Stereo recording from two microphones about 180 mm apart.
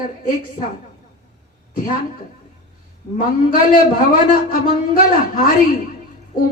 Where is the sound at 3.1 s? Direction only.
55° left (ahead or behind).